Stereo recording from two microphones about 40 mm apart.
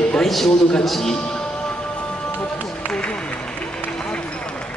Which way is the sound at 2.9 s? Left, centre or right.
Left.